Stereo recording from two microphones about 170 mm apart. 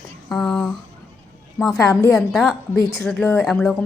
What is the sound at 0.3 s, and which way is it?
A woman's voice, 5° left (ahead or behind).